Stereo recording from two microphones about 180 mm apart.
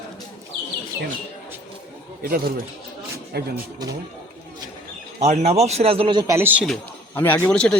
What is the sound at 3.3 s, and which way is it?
Speech, 65° right (ahead or behind).